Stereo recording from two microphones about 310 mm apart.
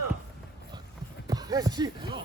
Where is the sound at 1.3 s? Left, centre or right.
Centre.